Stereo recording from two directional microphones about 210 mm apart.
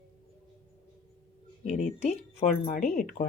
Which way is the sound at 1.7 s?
35° left (ahead or behind).